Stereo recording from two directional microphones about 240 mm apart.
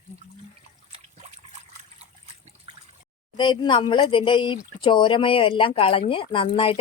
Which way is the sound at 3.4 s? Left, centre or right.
Centre.